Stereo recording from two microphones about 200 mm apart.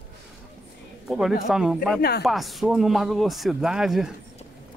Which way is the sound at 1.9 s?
50° left (ahead or behind).